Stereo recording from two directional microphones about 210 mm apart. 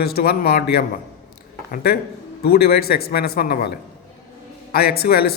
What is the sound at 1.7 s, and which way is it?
Speech, 45° left (ahead or behind).